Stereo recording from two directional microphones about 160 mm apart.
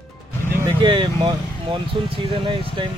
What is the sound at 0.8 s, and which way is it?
Speech, 30° right (ahead or behind).